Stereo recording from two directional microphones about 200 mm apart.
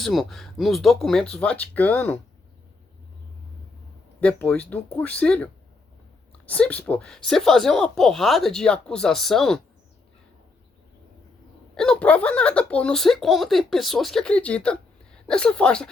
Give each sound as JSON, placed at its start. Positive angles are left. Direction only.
{"t": 0.0, "sound": "speech", "side_deg": 0}
{"t": 4.2, "sound": "speech", "side_deg": 5}
{"t": 6.5, "sound": "speech", "side_deg": 5}
{"t": 11.7, "sound": "speech", "side_deg": 5}